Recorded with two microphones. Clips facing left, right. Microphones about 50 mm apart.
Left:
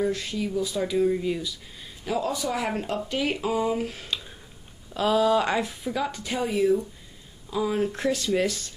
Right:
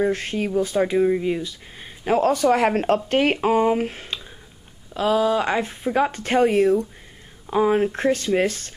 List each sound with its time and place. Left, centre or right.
0.0 s speech: right
7.4 s speech: right